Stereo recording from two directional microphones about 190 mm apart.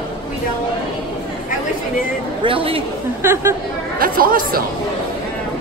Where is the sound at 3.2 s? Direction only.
15° right (ahead or behind).